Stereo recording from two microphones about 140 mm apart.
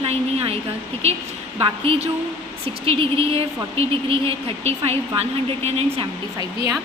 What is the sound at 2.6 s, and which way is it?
A woman's voice, 45° right (ahead or behind).